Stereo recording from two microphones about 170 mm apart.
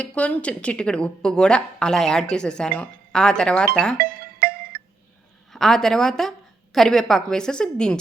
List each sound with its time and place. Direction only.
0.0 s a woman's voice: 5° left (ahead or behind)
3.9 s music: 65° right (ahead or behind)
5.5 s a woman's voice: centre (ahead or behind)